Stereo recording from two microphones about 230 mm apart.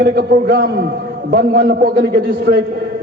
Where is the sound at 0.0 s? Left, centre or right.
Right.